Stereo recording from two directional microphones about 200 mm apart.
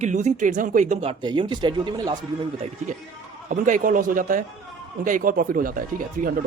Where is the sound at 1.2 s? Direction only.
25° right (ahead or behind).